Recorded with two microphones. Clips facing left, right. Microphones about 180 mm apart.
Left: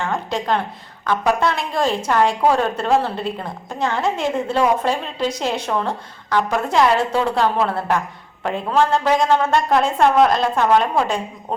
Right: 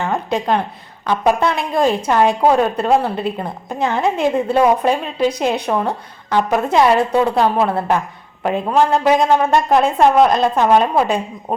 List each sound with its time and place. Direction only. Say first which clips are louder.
0.0 s a woman's voice: right 3 dB; 20° right (ahead or behind)